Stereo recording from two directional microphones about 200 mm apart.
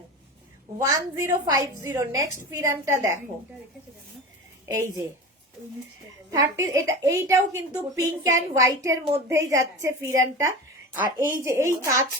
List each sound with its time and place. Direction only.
0.8 s speech: 15° right (ahead or behind)
4.6 s a woman's voice: 15° right (ahead or behind)
6.3 s speech: 15° right (ahead or behind)